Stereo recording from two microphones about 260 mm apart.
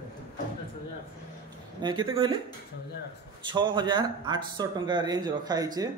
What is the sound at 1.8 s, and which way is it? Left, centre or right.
Speech, centre.